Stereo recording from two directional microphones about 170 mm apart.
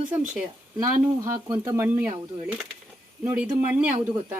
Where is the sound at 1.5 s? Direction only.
15° right (ahead or behind).